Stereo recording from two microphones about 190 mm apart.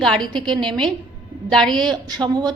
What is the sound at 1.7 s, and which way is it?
Speech, 25° right (ahead or behind).